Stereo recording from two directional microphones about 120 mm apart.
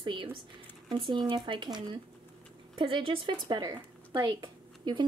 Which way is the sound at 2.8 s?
45° right (ahead or behind).